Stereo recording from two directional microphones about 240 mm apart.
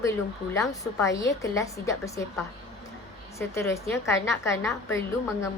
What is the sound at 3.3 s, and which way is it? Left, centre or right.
A woman's voice, centre.